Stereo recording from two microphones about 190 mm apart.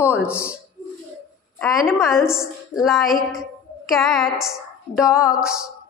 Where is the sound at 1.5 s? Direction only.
Centre (ahead or behind).